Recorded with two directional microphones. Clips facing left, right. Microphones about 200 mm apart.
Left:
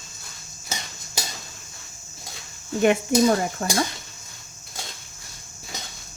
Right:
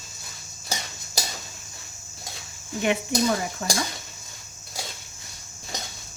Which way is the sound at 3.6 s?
40° left (ahead or behind).